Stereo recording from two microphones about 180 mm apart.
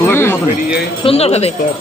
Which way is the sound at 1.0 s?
35° left (ahead or behind).